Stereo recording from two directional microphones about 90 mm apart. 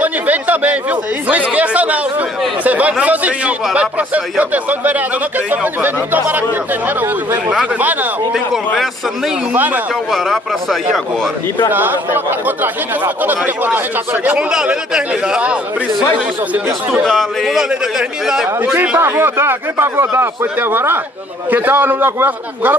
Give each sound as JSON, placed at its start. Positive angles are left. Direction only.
{"t": 0.0, "sound": "a man's voice", "side_deg": -15}
{"t": 7.8, "sound": "a man's voice", "side_deg": -20}
{"t": 9.5, "sound": "a man's voice", "side_deg": -20}
{"t": 10.1, "sound": "a man's voice", "side_deg": 0}
{"t": 11.7, "sound": "a man's voice", "side_deg": -20}
{"t": 17.0, "sound": "a man's voice", "side_deg": 0}
{"t": 18.9, "sound": "a man's voice", "side_deg": -25}